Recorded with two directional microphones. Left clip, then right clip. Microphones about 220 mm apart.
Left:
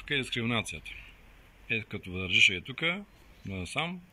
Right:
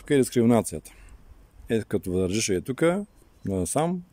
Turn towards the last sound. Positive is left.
turn(degrees=-55)  # may be behind; listen again after turning